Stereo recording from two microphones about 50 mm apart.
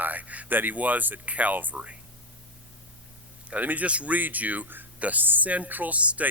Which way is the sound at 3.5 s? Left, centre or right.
Right.